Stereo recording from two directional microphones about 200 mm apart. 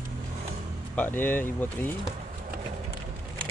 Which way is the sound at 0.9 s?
10° left (ahead or behind).